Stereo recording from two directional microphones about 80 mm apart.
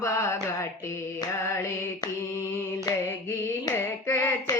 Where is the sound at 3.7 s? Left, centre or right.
Left.